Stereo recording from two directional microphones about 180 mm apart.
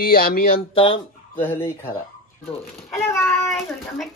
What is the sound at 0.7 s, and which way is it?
Speech, 30° left (ahead or behind).